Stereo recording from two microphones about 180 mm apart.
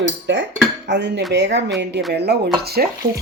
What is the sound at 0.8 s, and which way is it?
Dishes, 75° right (ahead or behind).